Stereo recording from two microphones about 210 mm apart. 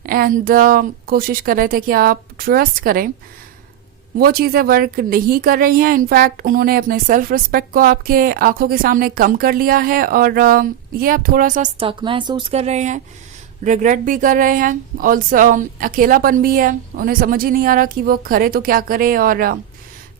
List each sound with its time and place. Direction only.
0.0 s a woman's voice: 45° right (ahead or behind)
4.2 s a woman's voice: 45° right (ahead or behind)